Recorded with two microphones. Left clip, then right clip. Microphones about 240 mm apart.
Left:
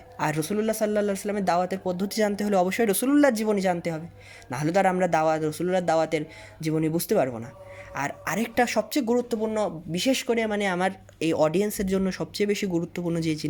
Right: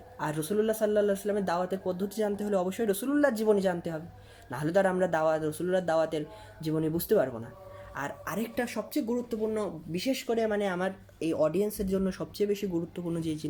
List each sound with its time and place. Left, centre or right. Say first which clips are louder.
0.2 s speech: left 3 dB; left